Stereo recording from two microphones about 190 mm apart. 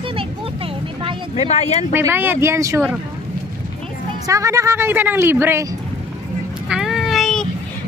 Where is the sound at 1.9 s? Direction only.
10° right (ahead or behind).